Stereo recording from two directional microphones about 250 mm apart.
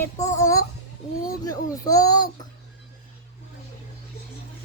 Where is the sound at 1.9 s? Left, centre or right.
Centre.